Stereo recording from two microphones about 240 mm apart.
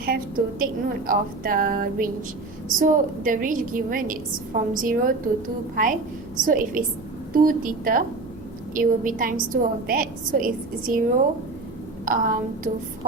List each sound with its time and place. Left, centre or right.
0.0 s a woman's voice: right
12.0 s a woman's voice: right